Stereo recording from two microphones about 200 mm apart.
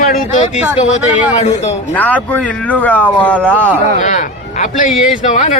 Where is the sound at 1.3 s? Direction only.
35° left (ahead or behind).